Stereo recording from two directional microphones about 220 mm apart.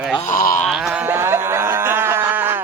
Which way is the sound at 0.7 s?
5° right (ahead or behind).